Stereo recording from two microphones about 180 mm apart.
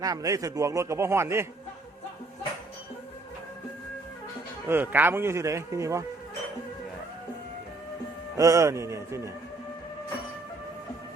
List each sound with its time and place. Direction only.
0.0 s a man's voice: 20° right (ahead or behind)
4.7 s a man's voice: 10° right (ahead or behind)
8.4 s a man's voice: 15° right (ahead or behind)